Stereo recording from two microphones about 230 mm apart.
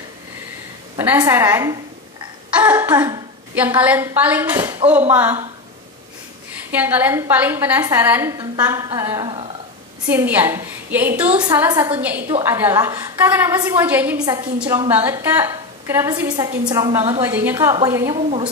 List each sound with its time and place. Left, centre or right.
0.9 s a woman's voice: centre
6.7 s a woman's voice: centre
10.0 s a woman's voice: centre
18.1 s a woman's voice: right